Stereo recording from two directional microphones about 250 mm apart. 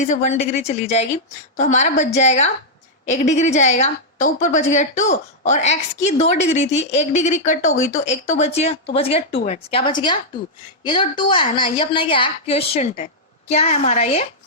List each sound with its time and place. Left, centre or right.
0.1 s a woman's voice: left